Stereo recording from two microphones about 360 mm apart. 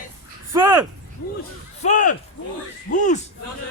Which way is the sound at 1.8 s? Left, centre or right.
Left.